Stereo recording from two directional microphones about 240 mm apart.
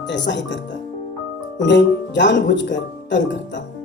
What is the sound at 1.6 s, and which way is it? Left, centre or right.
Speech, left.